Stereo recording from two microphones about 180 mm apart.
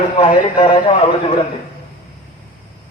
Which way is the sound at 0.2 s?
30° left (ahead or behind).